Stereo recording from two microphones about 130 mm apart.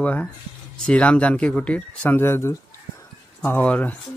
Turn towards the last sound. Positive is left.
turn(degrees=10)  # may be behind; listen again after turning